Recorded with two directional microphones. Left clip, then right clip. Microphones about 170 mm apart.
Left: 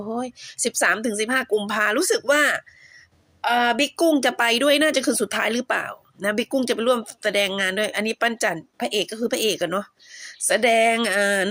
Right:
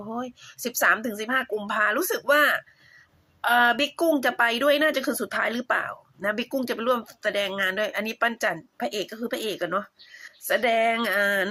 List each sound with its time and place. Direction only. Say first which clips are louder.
0.0 s speech: left 5 dB; 30° left (ahead or behind)